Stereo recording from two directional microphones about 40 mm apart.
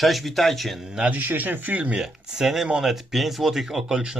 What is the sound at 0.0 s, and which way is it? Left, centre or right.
Speech, centre.